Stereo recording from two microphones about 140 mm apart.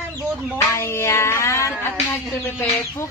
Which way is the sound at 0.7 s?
20° left (ahead or behind).